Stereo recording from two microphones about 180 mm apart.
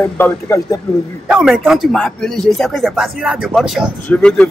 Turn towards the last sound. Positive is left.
turn(degrees=5)  # may be behind; listen again after turning